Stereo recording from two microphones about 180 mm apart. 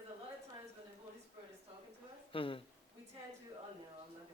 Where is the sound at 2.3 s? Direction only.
30° left (ahead or behind).